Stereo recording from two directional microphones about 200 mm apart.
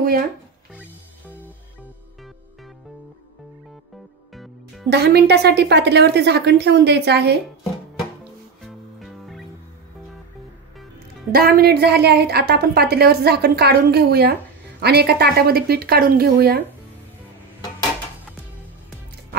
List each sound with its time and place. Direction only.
0.0 s speech: 45° right (ahead or behind)
0.7 s music: 10° right (ahead or behind)
4.8 s a woman's voice: 55° right (ahead or behind)
8.6 s music: centre (ahead or behind)
11.3 s a woman's voice: 50° right (ahead or behind)